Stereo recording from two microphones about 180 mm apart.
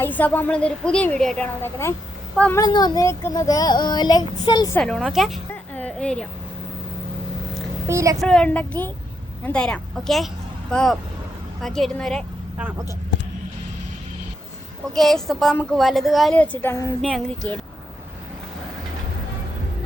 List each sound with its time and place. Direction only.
0.0 s a woman's voice: 10° left (ahead or behind)
2.5 s speech: 20° left (ahead or behind)
4.8 s a woman's voice: centre (ahead or behind)
5.7 s a sound: 5° left (ahead or behind)
7.9 s speech: 15° right (ahead or behind)
8.2 s a woman's voice: 5° left (ahead or behind)
12.5 s speech: 10° right (ahead or behind)
14.9 s a woman's voice: centre (ahead or behind)